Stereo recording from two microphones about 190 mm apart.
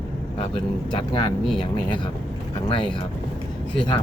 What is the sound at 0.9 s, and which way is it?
Speech, 25° left (ahead or behind).